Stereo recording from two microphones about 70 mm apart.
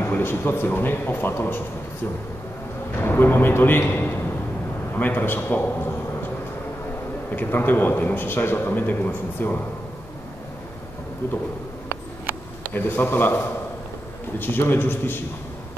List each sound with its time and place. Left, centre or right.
0.0 s speech: left
3.0 s a man's voice: left
12.7 s speech: left